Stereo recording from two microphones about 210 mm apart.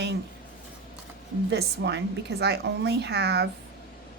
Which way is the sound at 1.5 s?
55° right (ahead or behind).